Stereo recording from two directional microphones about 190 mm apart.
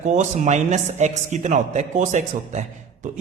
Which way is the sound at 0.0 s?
40° right (ahead or behind).